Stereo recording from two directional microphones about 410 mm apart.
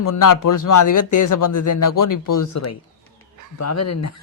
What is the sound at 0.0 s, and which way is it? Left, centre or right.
A woman's voice, left.